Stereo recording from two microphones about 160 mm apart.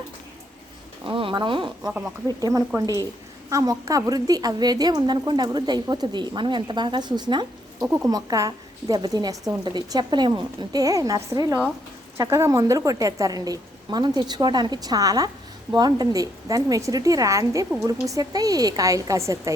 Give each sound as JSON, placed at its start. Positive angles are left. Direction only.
{"t": 1.0, "sound": "speech", "side_deg": -30}